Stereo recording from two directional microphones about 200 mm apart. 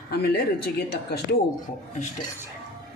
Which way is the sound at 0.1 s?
55° left (ahead or behind).